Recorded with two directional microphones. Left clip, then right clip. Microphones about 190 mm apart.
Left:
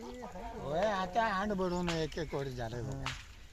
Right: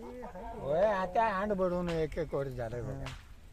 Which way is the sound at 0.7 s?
35° right (ahead or behind).